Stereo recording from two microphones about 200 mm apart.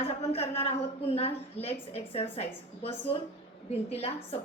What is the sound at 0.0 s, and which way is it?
A woman's voice, 30° left (ahead or behind).